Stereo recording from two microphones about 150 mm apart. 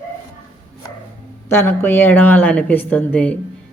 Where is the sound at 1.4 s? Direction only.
15° left (ahead or behind).